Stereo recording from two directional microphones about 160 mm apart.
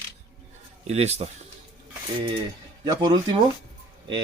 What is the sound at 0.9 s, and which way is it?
Speech, 40° right (ahead or behind).